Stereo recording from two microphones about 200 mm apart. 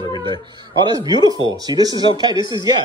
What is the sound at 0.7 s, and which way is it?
Speech, 20° right (ahead or behind).